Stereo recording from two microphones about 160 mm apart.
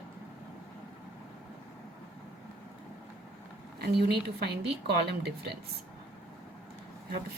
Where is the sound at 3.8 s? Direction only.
80° right.